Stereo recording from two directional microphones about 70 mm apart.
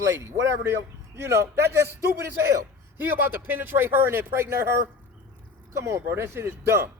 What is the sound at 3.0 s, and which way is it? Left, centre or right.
Speech, right.